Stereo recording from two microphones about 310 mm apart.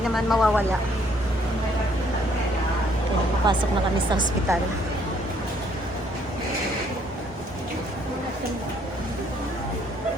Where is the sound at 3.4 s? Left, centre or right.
Centre.